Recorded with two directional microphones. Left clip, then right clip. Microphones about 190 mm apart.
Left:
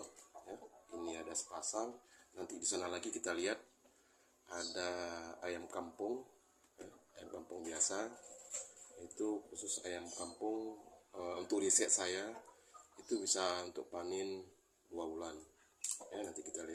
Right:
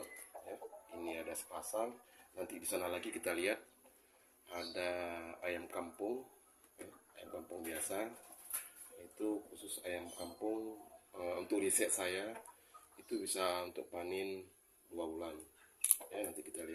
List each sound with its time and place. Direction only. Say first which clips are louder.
0.4 s a sound: right 3 dB; centre (ahead or behind)
2.3 s speech: even; centre (ahead or behind)
7.2 s speech: right 1 dB; centre (ahead or behind)
9.1 s speech: even; centre (ahead or behind)